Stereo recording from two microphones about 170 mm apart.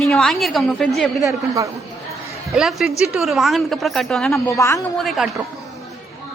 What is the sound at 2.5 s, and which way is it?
A woman's voice, centre (ahead or behind).